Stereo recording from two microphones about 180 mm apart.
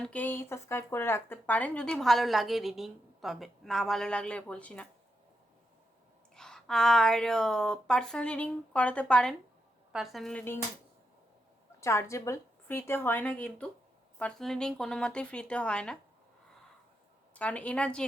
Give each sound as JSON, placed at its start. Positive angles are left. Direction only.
{"t": 0.0, "sound": "speech", "side_deg": 10}
{"t": 6.3, "sound": "speech", "side_deg": 5}
{"t": 11.8, "sound": "a woman's voice", "side_deg": 15}
{"t": 17.3, "sound": "a woman's voice", "side_deg": 10}